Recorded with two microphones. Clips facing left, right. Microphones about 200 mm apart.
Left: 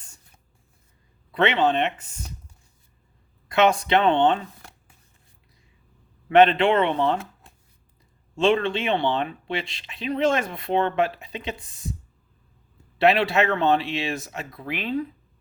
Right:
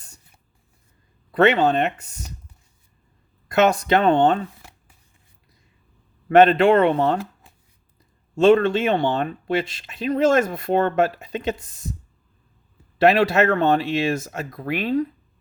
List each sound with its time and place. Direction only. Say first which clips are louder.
1.3 s speech: right 4 dB; 40° right (ahead or behind)
3.5 s speech: right 2 dB; 40° right (ahead or behind)
6.2 s speech: right 3 dB; 40° right (ahead or behind)
8.4 s speech: right 6 dB; 45° right (ahead or behind)
13.0 s speech: right 3 dB; 45° right (ahead or behind)